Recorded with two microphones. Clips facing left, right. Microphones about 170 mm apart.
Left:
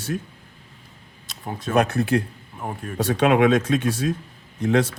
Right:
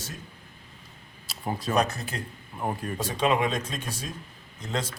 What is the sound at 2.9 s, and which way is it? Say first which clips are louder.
Speech: left 8 dB; 70° left (ahead or behind).